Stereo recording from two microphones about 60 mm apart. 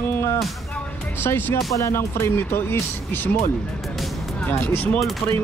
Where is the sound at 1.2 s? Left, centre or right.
Left.